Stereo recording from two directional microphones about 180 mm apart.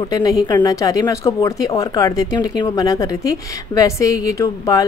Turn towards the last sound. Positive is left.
turn(degrees=20)  # may be behind; listen again after turning